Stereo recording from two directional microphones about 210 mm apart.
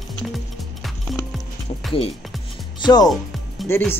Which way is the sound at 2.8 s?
20° left (ahead or behind).